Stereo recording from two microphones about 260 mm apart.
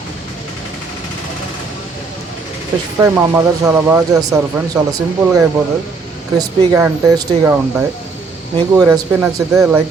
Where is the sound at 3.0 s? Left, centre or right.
Centre.